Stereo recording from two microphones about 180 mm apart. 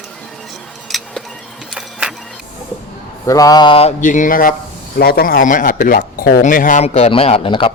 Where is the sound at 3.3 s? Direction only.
20° left (ahead or behind); by 4.5 s 50° left (ahead or behind).